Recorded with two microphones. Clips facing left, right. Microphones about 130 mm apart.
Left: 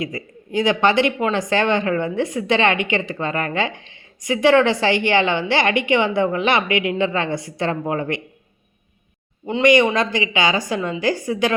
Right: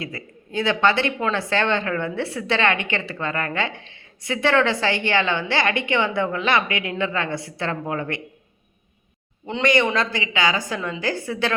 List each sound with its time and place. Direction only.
0.0 s speech: 15° left (ahead or behind)
9.6 s speech: 15° left (ahead or behind)